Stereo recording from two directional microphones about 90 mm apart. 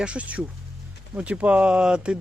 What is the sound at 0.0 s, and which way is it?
Speech, 15° right (ahead or behind).